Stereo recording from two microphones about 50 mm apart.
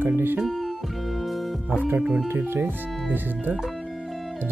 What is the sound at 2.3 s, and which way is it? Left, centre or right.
Speech, right.